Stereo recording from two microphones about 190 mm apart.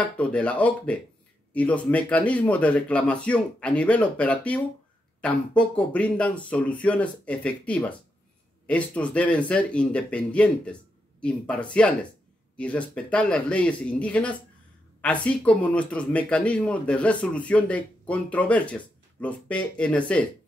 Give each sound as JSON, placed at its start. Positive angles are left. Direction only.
{"t": 0.0, "sound": "speech", "side_deg": 5}